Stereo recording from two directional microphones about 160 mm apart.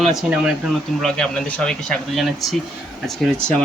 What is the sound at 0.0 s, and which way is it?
Speech, centre (ahead or behind).